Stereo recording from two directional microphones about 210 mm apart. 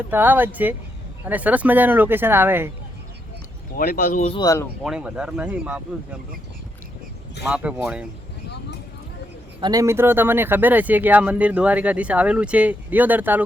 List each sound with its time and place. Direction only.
0.1 s speech: 10° right (ahead or behind)
3.8 s speech: 40° left (ahead or behind)
4.3 s speech: 20° left (ahead or behind)
4.8 s speech: 5° right (ahead or behind)
7.4 s speech: 5° right (ahead or behind)
9.6 s speech: 20° right (ahead or behind)